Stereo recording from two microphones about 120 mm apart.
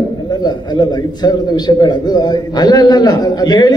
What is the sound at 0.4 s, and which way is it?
A man's voice, 35° left (ahead or behind).